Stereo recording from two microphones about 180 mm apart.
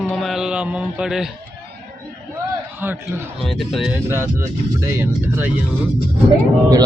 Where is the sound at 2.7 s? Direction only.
10° right (ahead or behind).